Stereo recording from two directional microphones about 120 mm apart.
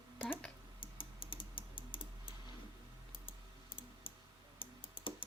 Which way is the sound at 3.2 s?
45° left (ahead or behind).